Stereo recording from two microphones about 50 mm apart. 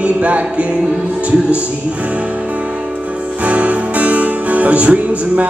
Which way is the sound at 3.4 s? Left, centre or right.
Right.